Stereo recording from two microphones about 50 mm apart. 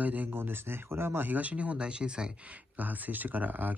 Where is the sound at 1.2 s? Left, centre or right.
Right.